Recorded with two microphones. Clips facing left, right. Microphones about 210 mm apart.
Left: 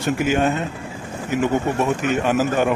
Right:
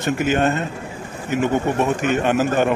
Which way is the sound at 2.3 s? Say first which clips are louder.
Even; 5° left (ahead or behind).